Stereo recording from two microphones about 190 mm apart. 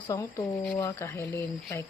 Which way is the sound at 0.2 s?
15° left (ahead or behind).